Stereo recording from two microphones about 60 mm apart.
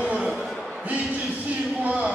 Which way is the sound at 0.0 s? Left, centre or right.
Centre.